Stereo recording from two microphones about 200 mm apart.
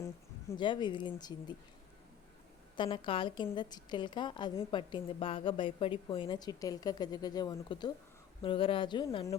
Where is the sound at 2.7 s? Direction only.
25° left (ahead or behind).